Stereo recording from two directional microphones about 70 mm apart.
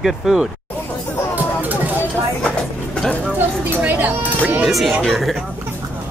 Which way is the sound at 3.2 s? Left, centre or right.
Right.